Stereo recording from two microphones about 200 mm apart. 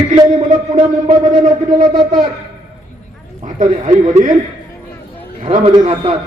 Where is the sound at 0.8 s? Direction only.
40° right (ahead or behind).